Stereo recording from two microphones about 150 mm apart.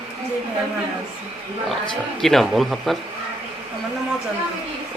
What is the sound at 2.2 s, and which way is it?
Speech, centre (ahead or behind).